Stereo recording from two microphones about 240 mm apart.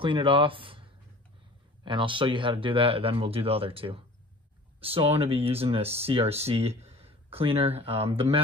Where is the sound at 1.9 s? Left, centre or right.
Right.